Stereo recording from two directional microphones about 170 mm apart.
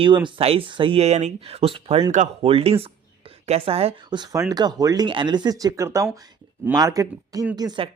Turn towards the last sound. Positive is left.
turn(degrees=-25)  # may be behind; listen again after turning